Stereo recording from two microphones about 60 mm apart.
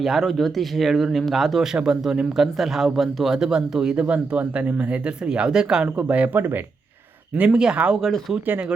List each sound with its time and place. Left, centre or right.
0.0 s speech: centre; by 6.6 s right
7.3 s speech: centre